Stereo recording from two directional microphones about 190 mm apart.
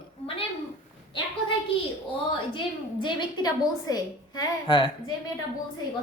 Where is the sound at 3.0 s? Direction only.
25° left (ahead or behind).